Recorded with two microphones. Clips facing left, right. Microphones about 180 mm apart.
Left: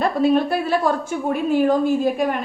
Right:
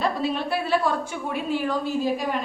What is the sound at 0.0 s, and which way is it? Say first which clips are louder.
A woman's voice: left 8 dB; 50° left (ahead or behind).